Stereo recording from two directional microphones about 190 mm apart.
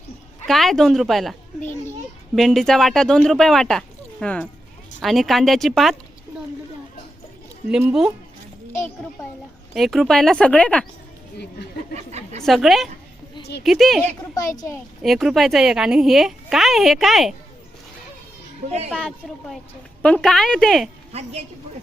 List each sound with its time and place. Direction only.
0.4 s a woman's voice: centre (ahead or behind)
7.7 s speech: 5° right (ahead or behind)
9.7 s speech: centre (ahead or behind)
11.9 s a sound: 35° right (ahead or behind)
12.4 s speech: centre (ahead or behind)
15.0 s speech: centre (ahead or behind)
18.9 s speech: 5° left (ahead or behind)
21.1 s a woman's voice: 35° right (ahead or behind)